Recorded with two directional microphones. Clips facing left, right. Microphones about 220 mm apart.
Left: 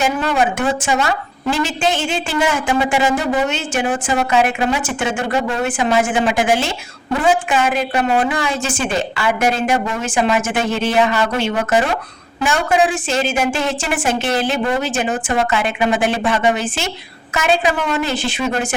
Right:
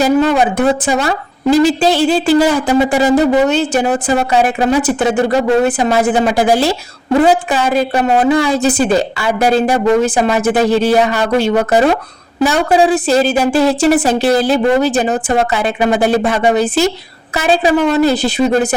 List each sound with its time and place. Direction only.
0.0 s a woman's voice: 35° right (ahead or behind)